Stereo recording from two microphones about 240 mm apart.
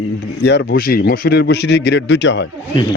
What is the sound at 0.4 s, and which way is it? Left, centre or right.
Speech, left.